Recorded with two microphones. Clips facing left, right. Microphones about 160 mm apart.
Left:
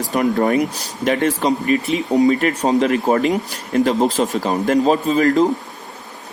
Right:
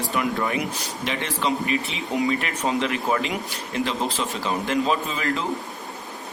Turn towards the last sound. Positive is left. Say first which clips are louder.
# left 11 dB
turn(degrees=40)  # may be behind; listen again after turning